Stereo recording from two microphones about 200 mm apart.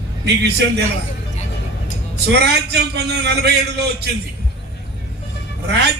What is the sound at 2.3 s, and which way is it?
A man's voice, 55° right (ahead or behind).